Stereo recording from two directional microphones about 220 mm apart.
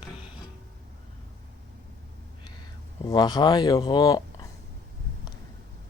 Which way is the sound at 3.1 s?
20° left (ahead or behind).